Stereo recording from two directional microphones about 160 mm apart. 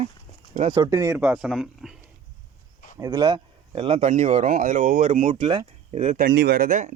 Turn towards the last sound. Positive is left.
turn(degrees=-50)  # may be behind; listen again after turning